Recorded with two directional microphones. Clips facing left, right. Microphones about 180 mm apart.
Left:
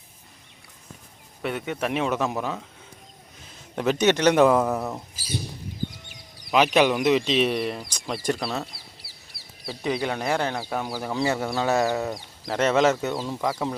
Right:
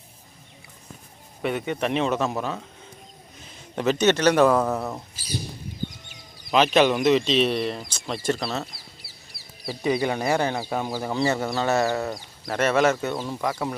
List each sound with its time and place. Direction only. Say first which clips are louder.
1.4 s speech: right 2 dB; 5° right (ahead or behind); by 2.6 s 15° left (ahead or behind)
3.8 s speech: right 1 dB; 10° left (ahead or behind)
4.6 s speech: even; 5° left (ahead or behind)
6.5 s speech: right 1 dB; 10° left (ahead or behind)
9.6 s speech: right 3 dB; 5° right (ahead or behind)
12.5 s speech: even; 20° left (ahead or behind)